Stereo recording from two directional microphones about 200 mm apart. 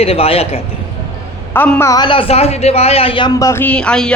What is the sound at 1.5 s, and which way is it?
A man's voice, 10° left (ahead or behind).